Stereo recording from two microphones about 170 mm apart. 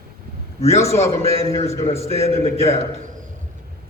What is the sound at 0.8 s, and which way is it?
A man's voice, 35° left (ahead or behind).